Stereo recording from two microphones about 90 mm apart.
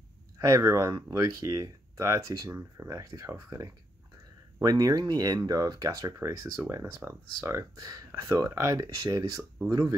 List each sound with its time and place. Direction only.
0.4 s speech: 35° right (ahead or behind)
7.8 s speech: 35° right (ahead or behind)